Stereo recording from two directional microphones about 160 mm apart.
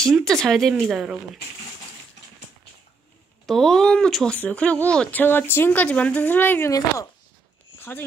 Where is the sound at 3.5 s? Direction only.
Centre (ahead or behind).